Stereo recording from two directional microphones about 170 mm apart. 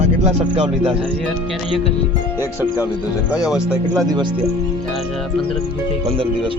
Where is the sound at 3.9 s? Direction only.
25° right (ahead or behind).